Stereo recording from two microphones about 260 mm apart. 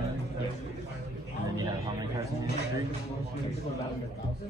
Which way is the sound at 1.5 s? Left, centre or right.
Centre.